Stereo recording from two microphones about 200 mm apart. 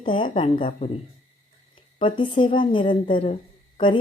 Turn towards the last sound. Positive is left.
turn(degrees=25)  # may be behind; listen again after turning